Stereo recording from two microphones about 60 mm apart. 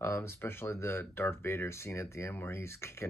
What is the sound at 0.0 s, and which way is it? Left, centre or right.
Speech, left.